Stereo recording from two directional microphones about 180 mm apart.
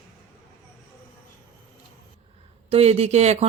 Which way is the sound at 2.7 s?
35° right (ahead or behind).